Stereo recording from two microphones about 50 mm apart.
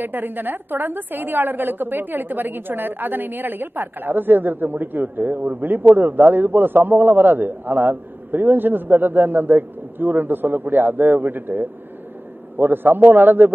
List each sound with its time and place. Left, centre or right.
0.0 s a woman's voice: right